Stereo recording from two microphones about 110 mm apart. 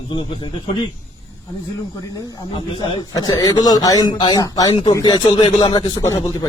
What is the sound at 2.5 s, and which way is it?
A man's voice, 50° left (ahead or behind).